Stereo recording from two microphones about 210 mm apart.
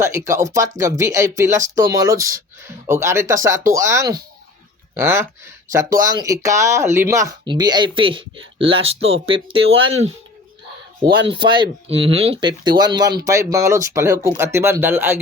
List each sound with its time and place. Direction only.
0.0 s speech: 15° right (ahead or behind)
11.3 s speech: 20° right (ahead or behind)